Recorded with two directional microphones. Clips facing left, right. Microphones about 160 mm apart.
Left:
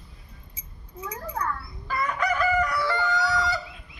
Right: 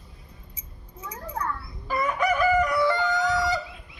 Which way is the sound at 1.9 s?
20° right (ahead or behind).